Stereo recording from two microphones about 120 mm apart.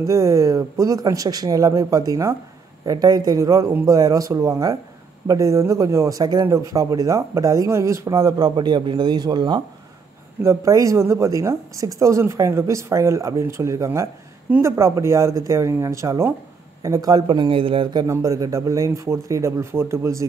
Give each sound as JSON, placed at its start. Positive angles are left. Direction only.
{"t": 0.0, "sound": "a man's voice", "side_deg": -25}
{"t": 10.4, "sound": "a man's voice", "side_deg": -25}
{"t": 18.0, "sound": "a man's voice", "side_deg": -25}